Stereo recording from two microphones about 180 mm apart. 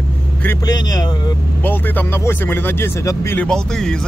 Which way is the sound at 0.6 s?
20° left (ahead or behind).